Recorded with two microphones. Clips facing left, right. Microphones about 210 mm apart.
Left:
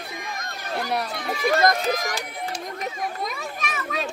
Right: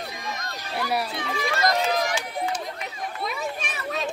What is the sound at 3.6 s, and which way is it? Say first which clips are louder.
Children playing: left 3 dB; 30° right (ahead or behind).